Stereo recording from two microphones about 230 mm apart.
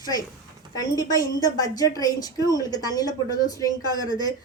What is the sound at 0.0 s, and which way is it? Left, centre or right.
Speech, centre.